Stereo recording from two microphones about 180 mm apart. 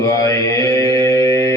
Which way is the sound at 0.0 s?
15° left (ahead or behind).